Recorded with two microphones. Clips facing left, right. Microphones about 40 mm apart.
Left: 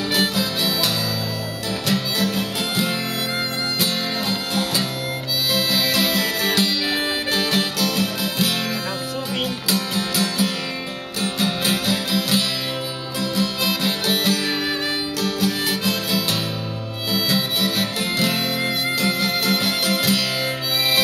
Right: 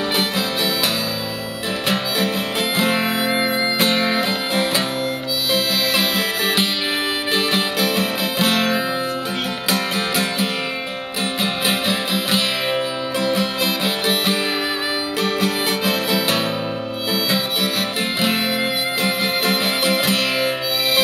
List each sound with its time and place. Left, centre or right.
0.1 s music: right
1.9 s music: right
5.5 s music: centre
15.2 s music: right
17.1 s music: centre